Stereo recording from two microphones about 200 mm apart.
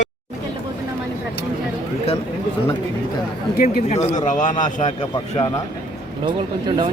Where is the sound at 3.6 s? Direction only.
35° left (ahead or behind).